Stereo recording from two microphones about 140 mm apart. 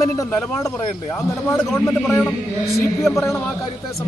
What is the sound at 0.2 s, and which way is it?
A man's voice, 25° left (ahead or behind).